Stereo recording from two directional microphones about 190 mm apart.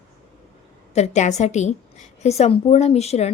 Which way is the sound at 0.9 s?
35° left (ahead or behind).